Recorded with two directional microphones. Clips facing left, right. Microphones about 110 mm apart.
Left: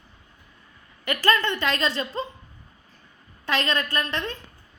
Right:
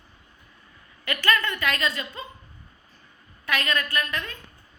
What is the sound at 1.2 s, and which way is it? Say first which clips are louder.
A woman's voice: left 2 dB; 25° left (ahead or behind).